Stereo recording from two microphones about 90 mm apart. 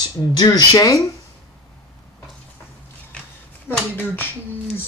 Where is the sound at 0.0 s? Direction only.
45° left (ahead or behind).